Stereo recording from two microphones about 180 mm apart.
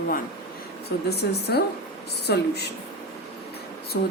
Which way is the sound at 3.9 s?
75° left (ahead or behind).